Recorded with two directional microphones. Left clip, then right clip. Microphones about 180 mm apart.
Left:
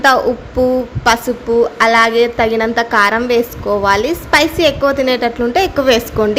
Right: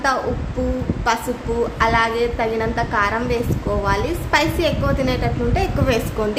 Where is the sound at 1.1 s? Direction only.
40° left (ahead or behind).